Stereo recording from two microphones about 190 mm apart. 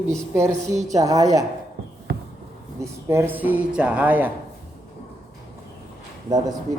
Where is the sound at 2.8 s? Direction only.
15° right (ahead or behind).